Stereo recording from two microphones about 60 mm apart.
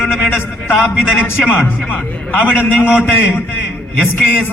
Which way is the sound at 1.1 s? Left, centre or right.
Left.